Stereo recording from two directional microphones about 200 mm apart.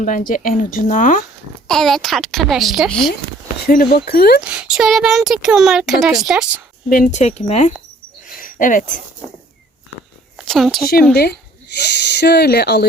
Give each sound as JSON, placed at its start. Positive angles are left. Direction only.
{"t": 0.0, "sound": "speech", "side_deg": 40}
{"t": 1.6, "sound": "speech", "side_deg": 0}
{"t": 3.7, "sound": "speech", "side_deg": 50}
{"t": 4.4, "sound": "speech", "side_deg": -5}
{"t": 6.9, "sound": "speech", "side_deg": 40}
{"t": 8.2, "sound": "a sound", "side_deg": 45}
{"t": 10.3, "sound": "a sound", "side_deg": 0}
{"t": 11.1, "sound": "speech", "side_deg": 50}